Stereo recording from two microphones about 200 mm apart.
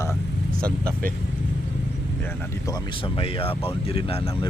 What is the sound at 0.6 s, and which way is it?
Speech, 50° right (ahead or behind).